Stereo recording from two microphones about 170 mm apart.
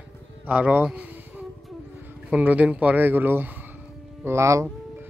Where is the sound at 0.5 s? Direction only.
10° right (ahead or behind).